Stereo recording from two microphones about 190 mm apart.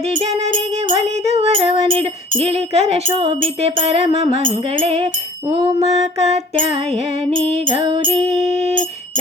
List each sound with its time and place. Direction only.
0.0 s music: 30° right (ahead or behind)